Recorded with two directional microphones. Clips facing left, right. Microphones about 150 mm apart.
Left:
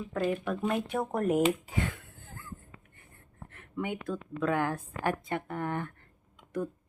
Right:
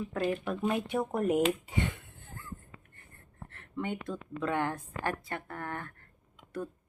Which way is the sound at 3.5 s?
10° left (ahead or behind).